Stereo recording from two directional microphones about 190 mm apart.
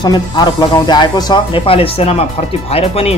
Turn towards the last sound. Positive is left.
turn(degrees=30)  # may be behind; listen again after turning